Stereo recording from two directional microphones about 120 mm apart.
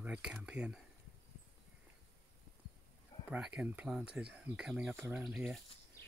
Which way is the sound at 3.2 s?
10° right (ahead or behind).